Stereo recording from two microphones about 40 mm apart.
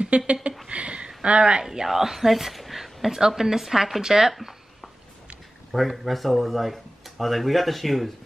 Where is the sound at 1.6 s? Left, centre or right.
Centre.